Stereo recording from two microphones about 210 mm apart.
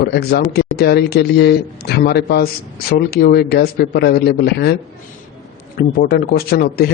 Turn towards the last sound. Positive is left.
turn(degrees=45)  # may be behind; listen again after turning